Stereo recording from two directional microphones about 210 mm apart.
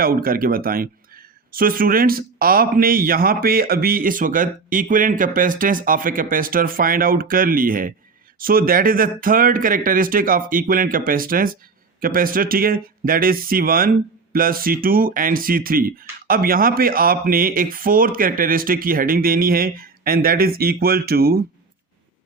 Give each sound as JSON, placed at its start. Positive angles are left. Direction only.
{"t": 0.0, "sound": "speech", "side_deg": -45}